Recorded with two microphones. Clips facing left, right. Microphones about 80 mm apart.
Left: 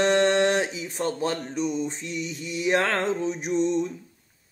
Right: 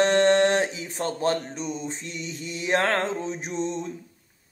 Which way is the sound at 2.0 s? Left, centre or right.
Right.